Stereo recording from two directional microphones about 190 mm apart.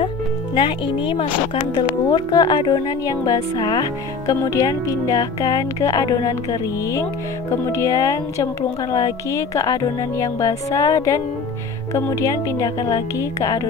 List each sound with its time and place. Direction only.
0.6 s speech: 25° left (ahead or behind)